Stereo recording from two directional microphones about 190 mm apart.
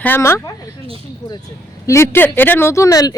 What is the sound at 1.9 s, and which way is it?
Speech, 10° left (ahead or behind).